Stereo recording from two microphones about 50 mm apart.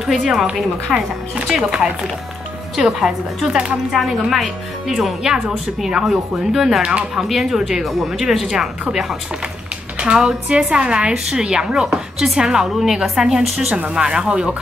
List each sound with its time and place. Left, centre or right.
0.2 s a woman's voice: centre
1.3 s a woman's voice: centre
6.8 s speech: right
7.2 s a woman's voice: centre
9.9 s a woman's voice: centre
13.7 s speech: right